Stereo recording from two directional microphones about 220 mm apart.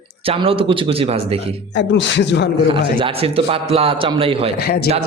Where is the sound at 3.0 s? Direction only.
25° right (ahead or behind).